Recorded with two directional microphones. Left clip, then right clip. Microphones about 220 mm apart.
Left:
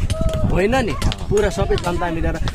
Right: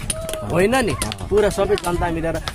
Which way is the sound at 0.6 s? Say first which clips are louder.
Right 1 dB; 20° right (ahead or behind).